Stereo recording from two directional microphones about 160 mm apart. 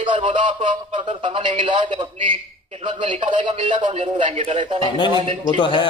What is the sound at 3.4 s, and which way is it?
A man's voice, 30° right (ahead or behind).